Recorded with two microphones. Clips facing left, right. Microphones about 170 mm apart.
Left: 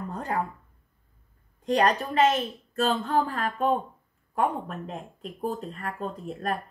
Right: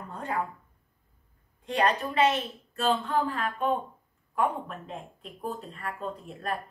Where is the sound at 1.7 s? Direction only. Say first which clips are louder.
Left 3 dB; 40° left (ahead or behind).